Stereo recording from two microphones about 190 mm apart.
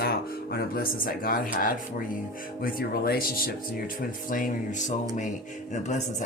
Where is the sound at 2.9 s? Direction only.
50° left (ahead or behind).